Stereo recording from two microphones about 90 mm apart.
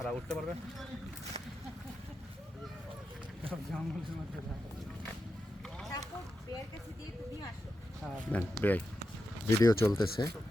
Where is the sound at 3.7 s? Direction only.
10° left (ahead or behind).